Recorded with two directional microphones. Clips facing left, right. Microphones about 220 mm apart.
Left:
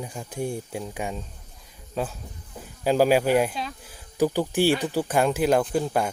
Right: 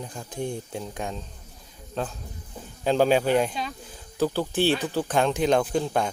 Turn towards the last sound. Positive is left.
turn(degrees=5)  # may be behind; listen again after turning